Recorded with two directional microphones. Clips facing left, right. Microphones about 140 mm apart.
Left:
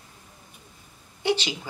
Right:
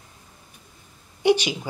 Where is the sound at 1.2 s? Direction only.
15° right (ahead or behind).